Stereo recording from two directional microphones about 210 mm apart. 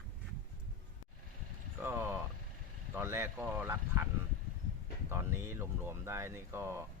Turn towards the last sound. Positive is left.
turn(degrees=-10)  # may be behind; listen again after turning